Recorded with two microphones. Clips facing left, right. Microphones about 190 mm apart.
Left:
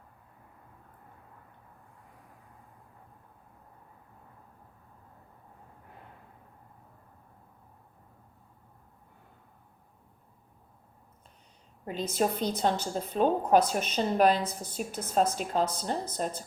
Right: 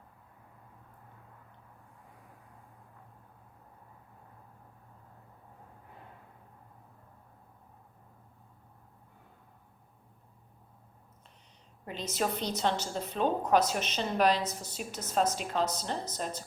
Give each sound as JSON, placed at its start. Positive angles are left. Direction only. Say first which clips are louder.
{"t": 11.9, "sound": "a woman's voice", "louder": "left 4 dB", "side_deg": 50}